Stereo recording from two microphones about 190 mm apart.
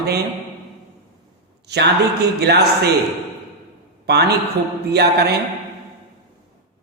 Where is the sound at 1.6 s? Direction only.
60° right (ahead or behind).